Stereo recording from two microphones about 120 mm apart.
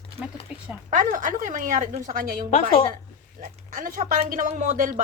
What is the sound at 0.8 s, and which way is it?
Speech, 90° right.